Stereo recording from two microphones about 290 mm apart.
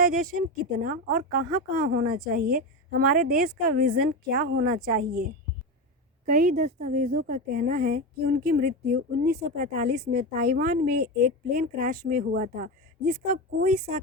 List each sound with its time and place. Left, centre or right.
0.6 s a woman's voice: right
6.2 s a woman's voice: right